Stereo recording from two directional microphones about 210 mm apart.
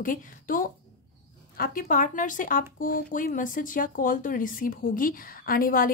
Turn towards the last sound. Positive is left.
turn(degrees=40)  # may be behind; listen again after turning